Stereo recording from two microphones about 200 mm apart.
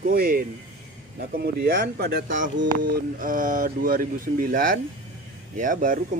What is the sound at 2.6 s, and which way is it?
Speech, 55° right (ahead or behind).